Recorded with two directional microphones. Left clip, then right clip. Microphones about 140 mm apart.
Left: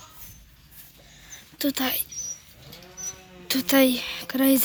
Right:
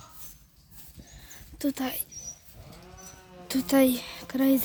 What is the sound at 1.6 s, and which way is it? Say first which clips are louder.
Speech: left 5 dB; 10° right (ahead or behind).